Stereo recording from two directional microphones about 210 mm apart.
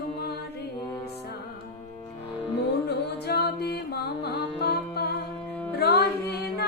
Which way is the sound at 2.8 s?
50° left (ahead or behind).